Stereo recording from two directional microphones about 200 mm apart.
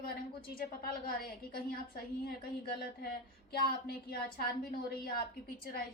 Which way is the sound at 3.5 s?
50° left (ahead or behind).